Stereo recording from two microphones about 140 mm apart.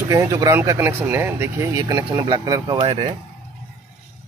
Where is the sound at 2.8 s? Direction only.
40° right (ahead or behind).